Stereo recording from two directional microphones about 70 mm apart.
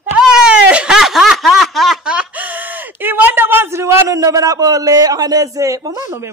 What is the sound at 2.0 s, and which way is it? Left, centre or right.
Speech, centre.